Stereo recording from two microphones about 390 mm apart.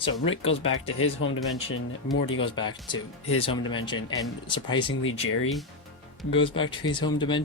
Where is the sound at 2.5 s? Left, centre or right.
Centre.